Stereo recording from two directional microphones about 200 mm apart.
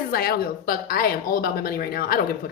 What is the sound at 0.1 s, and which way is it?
Speech, 50° left (ahead or behind).